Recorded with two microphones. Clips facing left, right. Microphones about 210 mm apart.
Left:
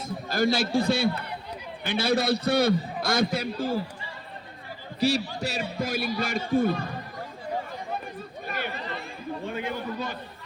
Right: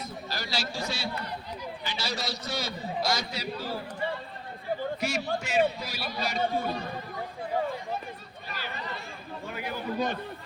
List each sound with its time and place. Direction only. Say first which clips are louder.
0.3 s a man's voice: left 12 dB; 50° left (ahead or behind)
4.9 s a man's voice: left 5 dB; 35° left (ahead or behind); by 6.8 s 55° left (ahead or behind)
8.4 s chatter: left 5 dB; 55° left (ahead or behind)
9.5 s a sound: left 4 dB; 25° left (ahead or behind)